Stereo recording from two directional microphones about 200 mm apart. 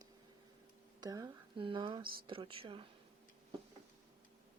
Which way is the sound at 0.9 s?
20° right (ahead or behind).